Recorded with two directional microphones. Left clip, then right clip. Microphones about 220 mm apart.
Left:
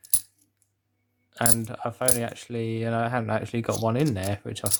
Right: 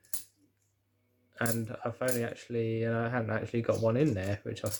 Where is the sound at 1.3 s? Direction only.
25° left (ahead or behind).